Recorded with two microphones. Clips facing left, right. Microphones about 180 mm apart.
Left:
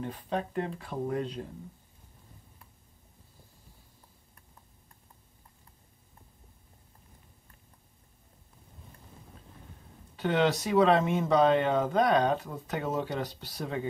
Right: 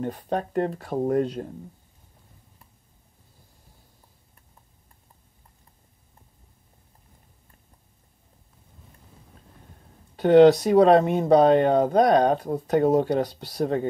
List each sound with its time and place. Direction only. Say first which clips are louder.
0.0 s speech: right 6 dB; 45° right (ahead or behind)
10.1 s speech: right 13 dB; 40° right (ahead or behind)